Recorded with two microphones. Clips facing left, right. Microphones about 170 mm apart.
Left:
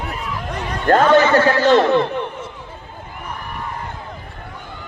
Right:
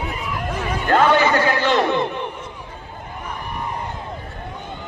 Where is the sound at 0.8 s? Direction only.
45° left (ahead or behind).